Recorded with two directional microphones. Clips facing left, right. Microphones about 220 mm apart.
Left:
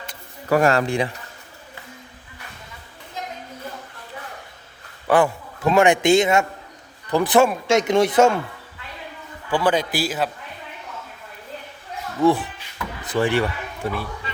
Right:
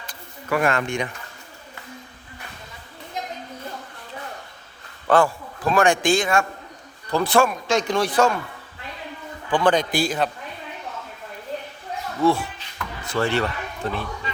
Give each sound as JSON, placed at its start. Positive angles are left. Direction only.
{"t": 0.4, "sound": "a man's voice", "side_deg": 40}
{"t": 5.0, "sound": "a man's voice", "side_deg": 15}
{"t": 9.5, "sound": "a man's voice", "side_deg": 10}
{"t": 12.2, "sound": "speech", "side_deg": 15}